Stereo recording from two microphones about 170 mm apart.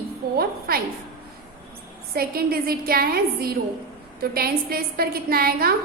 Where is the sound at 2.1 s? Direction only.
60° right (ahead or behind).